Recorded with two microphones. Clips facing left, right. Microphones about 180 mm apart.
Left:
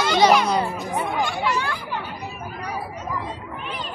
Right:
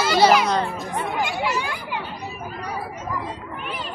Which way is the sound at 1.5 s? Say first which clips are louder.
Left 1 dB; 15° right (ahead or behind).